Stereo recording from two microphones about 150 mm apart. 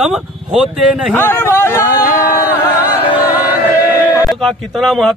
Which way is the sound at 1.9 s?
70° left (ahead or behind).